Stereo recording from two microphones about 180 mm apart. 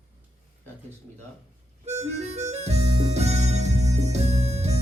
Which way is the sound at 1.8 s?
35° right (ahead or behind).